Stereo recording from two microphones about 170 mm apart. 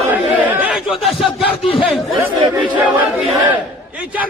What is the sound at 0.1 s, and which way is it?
Crowd, 10° right (ahead or behind).